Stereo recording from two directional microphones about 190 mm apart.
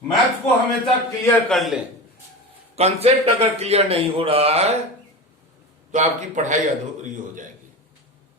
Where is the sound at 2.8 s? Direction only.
35° right (ahead or behind).